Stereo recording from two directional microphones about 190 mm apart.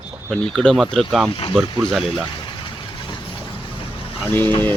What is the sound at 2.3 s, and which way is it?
Vehicle, 25° left (ahead or behind).